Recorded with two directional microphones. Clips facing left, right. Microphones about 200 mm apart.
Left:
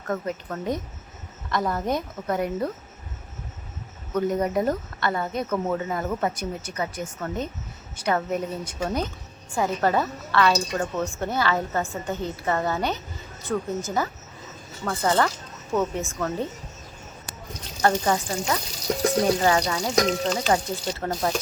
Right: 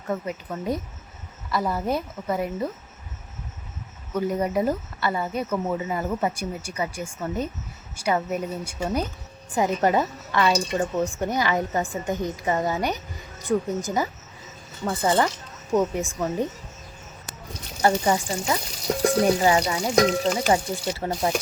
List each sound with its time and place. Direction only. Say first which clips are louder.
0.1 s a woman's voice: even; 10° right (ahead or behind)
4.1 s a woman's voice: left 1 dB; 5° right (ahead or behind)
17.8 s a woman's voice: right 1 dB; 10° right (ahead or behind)
19.4 s a woman's voice: right 1 dB; 10° right (ahead or behind)